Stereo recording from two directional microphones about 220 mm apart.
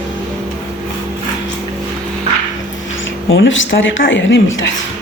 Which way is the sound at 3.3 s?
60° left (ahead or behind).